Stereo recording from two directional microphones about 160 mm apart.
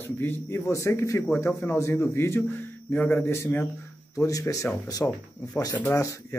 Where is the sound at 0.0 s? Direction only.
15° left (ahead or behind).